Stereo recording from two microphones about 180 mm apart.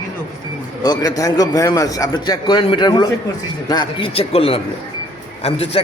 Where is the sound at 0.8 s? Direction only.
20° left (ahead or behind).